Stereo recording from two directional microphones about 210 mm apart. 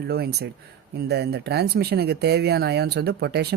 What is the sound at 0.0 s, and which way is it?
Speech, 50° right (ahead or behind).